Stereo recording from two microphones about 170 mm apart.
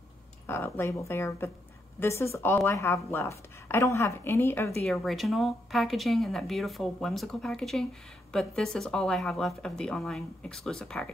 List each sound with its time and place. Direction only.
0.5 s a woman's voice: 15° left (ahead or behind)
4.8 s speech: centre (ahead or behind)